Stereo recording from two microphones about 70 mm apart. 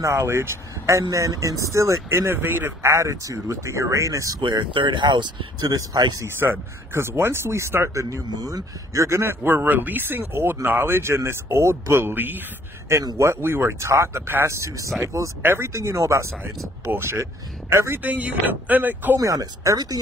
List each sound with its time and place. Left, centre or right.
0.0 s speech: right
1.1 s speech: right
4.5 s speech: right
6.2 s speech: right
9.2 s speech: right
16.8 s speech: right
17.2 s speech: right
18.0 s speech: right
19.1 s speech: right